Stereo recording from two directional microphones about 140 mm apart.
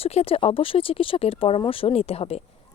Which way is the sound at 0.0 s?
45° left (ahead or behind).